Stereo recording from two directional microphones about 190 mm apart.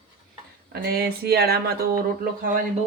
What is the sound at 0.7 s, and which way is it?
A man's voice, 55° right (ahead or behind).